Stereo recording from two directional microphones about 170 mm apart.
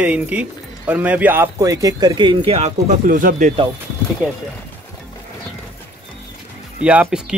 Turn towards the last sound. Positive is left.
turn(degrees=-10)  # may be behind; listen again after turning